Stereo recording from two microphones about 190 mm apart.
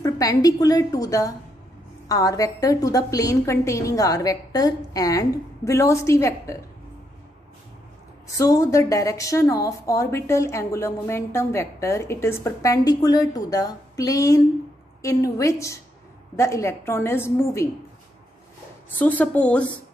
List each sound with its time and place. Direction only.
0.0 s a woman's voice: 20° left (ahead or behind)
8.4 s a woman's voice: 15° left (ahead or behind)
18.9 s a woman's voice: 10° left (ahead or behind)